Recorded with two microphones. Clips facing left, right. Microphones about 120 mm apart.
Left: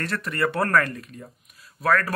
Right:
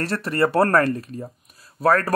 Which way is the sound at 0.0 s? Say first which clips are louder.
Right 5 dB; 35° right (ahead or behind).